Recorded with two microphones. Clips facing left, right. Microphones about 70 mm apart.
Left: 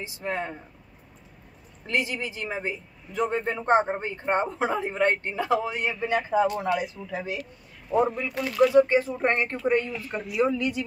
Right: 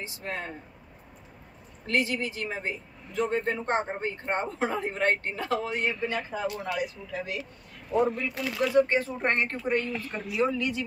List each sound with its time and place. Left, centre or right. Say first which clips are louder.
0.2 s speech: left 6 dB; left
1.9 s a man's voice: even; centre
6.4 s a man's voice: left 5 dB; left